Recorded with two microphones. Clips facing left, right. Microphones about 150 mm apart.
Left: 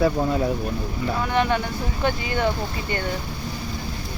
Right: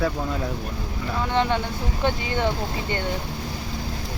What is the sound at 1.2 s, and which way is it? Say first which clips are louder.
Speech: even; 20° right (ahead or behind).